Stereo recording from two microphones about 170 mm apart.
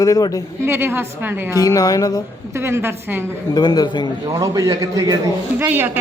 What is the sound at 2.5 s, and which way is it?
Speech, 15° right (ahead or behind).